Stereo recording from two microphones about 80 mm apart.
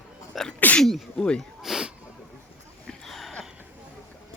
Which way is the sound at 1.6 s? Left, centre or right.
Centre.